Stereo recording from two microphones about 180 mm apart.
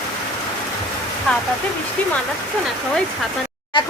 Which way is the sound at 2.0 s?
10° left (ahead or behind).